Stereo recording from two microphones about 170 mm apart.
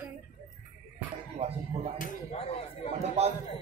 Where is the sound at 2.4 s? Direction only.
35° left (ahead or behind).